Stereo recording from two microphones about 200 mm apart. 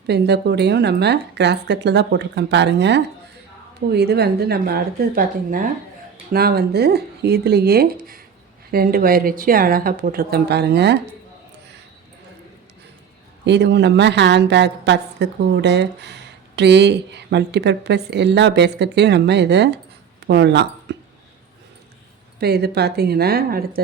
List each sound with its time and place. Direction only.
0.1 s a woman's voice: 55° right (ahead or behind)
13.4 s a woman's voice: 60° right (ahead or behind)
22.4 s a woman's voice: 55° right (ahead or behind)